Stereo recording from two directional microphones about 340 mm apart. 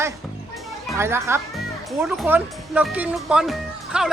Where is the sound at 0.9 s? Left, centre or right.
Centre.